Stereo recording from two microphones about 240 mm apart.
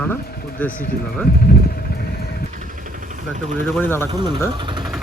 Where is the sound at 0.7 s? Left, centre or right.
Left.